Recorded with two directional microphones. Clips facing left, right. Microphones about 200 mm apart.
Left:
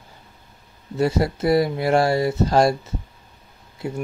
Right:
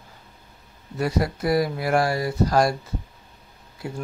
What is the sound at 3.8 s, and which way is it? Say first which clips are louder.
Speech: left 4 dB; 25° left (ahead or behind).